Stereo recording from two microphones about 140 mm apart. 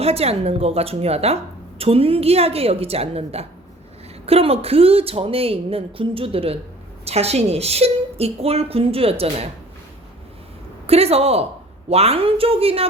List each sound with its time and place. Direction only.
0.0 s a woman's voice: 45° right (ahead or behind)
10.8 s a woman's voice: 45° right (ahead or behind)